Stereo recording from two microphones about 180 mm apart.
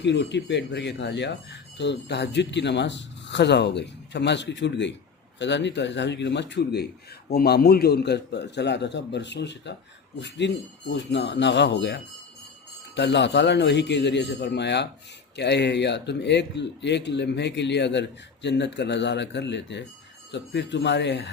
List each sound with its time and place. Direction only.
0.0 s speech: 75° left (ahead or behind)